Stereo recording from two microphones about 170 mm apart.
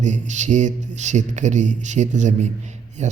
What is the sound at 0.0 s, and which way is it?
A man's voice, 45° right (ahead or behind).